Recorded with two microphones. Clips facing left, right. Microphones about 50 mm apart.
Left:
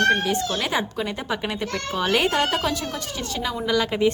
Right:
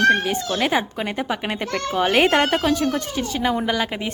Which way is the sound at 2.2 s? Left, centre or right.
Right.